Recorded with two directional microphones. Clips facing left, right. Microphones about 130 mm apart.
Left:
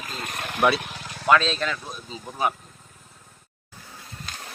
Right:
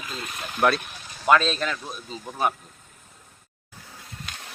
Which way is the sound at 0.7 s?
80° left.